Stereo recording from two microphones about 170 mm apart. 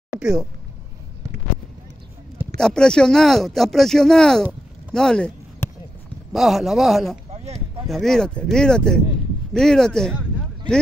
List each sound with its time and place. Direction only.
0.2 s speech: 5° right (ahead or behind)
2.5 s speech: 5° left (ahead or behind)
6.3 s speech: centre (ahead or behind)
7.2 s a sound: 35° right (ahead or behind)
7.8 s speech: centre (ahead or behind)